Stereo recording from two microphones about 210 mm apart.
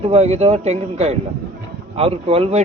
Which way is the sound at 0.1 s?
30° right (ahead or behind).